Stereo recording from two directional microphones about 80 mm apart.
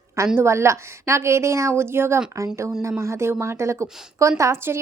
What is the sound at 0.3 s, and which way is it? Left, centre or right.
A woman's voice, right.